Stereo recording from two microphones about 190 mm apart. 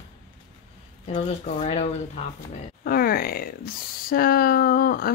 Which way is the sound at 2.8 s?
50° left (ahead or behind).